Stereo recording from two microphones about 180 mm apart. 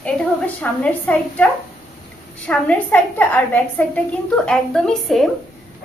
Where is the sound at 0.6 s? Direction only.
10° left (ahead or behind).